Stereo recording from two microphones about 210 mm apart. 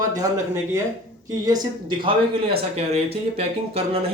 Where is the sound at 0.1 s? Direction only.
15° right (ahead or behind).